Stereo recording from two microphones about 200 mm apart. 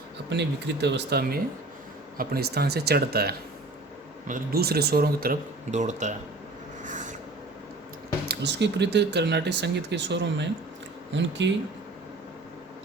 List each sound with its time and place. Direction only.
0.3 s speech: 60° right (ahead or behind); by 6.1 s 35° right (ahead or behind)
6.8 s a sound: 40° right (ahead or behind)
8.3 s speech: 60° right (ahead or behind)